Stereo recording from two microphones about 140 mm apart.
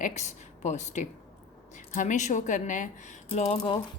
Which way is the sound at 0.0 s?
55° left (ahead or behind).